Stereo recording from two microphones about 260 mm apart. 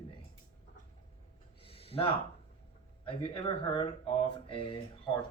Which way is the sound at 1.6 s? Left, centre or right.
Left.